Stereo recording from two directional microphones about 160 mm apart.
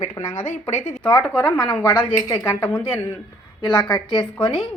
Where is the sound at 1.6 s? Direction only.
30° left (ahead or behind).